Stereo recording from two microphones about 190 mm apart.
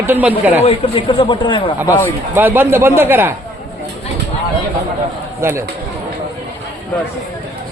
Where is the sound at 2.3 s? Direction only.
10° right (ahead or behind).